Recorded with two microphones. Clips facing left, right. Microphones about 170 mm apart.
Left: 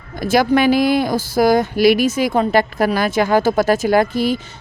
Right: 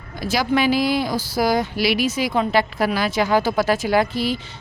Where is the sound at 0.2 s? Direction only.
50° left (ahead or behind).